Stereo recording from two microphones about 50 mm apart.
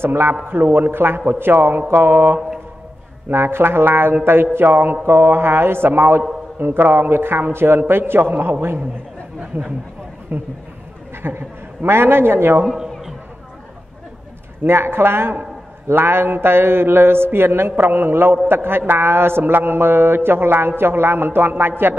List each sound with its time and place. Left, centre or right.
0.0 s a man's voice: right
0.5 s a man's voice: right
8.0 s a man's voice: right
10.3 s a man's voice: right
11.2 s a man's voice: right
12.6 s a man's voice: centre
14.6 s a man's voice: right